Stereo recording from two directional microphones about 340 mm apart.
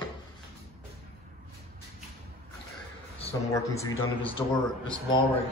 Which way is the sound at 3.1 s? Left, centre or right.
Centre.